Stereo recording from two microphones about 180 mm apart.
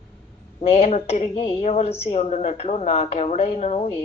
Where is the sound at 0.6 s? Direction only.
35° left (ahead or behind).